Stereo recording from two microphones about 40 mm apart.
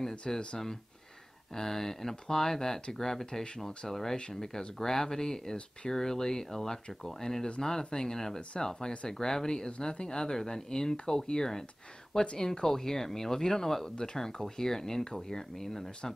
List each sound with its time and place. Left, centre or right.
0.3 s speech: centre
1.5 s speech: centre
9.7 s speech: left